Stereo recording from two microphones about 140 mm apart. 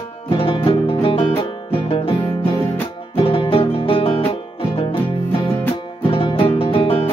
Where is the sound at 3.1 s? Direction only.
40° left (ahead or behind).